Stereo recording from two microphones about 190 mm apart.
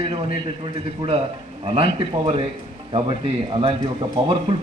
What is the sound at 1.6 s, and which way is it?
Speech, 30° right (ahead or behind).